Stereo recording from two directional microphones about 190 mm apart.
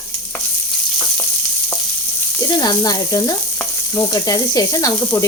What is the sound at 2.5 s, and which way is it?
Frying, 20° left (ahead or behind).